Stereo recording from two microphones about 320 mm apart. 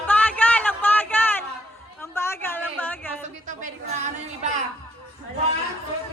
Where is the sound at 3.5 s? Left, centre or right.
Right.